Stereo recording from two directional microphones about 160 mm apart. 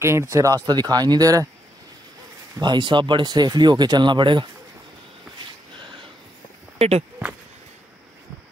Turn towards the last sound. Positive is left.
turn(degrees=-40)  # may be behind; listen again after turning